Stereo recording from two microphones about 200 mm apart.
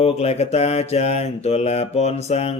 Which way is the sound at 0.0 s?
30° left (ahead or behind).